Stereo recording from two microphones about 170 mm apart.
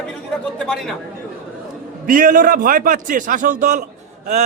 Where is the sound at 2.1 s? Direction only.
55° right (ahead or behind).